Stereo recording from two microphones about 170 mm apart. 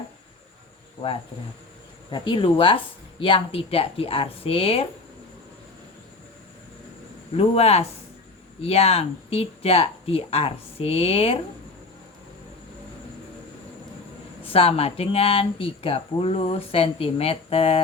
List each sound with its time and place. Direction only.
2.0 s speech: 25° left (ahead or behind)
7.3 s speech: 35° left (ahead or behind)
14.5 s speech: 35° left (ahead or behind)